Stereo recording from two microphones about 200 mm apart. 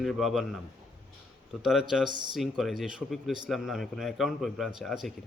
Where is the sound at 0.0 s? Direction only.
Centre (ahead or behind).